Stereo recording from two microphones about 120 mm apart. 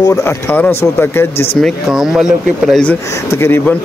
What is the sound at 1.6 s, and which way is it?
Speech, centre (ahead or behind).